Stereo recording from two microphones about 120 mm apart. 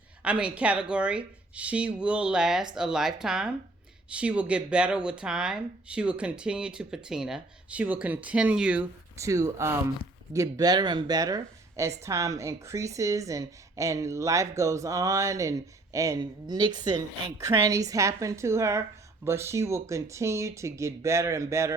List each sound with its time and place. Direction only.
0.2 s speech: 10° right (ahead or behind)
9.1 s a woman's voice: 25° right (ahead or behind)